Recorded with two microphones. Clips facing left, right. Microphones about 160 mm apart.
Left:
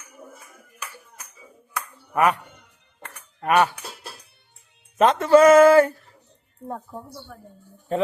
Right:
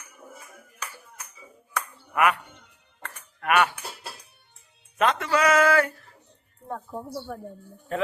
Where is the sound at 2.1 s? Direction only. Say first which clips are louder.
Left 3 dB; 35° left (ahead or behind).